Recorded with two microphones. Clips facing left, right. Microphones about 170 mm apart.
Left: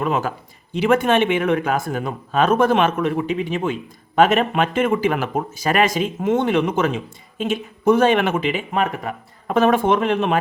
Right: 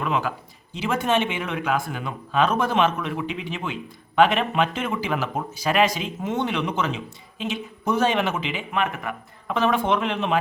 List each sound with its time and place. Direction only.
0.0 s a man's voice: 45° left (ahead or behind)
0.8 s a man's voice: 60° left (ahead or behind)
8.7 s a man's voice: 35° left (ahead or behind)
9.6 s a man's voice: 50° left (ahead or behind)